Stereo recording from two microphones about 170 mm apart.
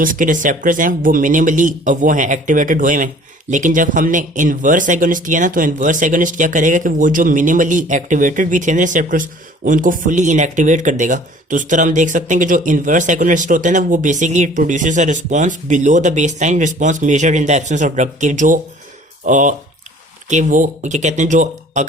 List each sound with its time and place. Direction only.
0.0 s speech: 55° right (ahead or behind)